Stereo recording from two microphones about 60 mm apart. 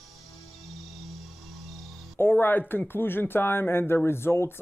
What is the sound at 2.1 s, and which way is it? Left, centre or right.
Speech, left.